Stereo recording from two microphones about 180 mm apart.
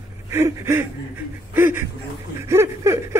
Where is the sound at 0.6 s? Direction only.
15° right (ahead or behind).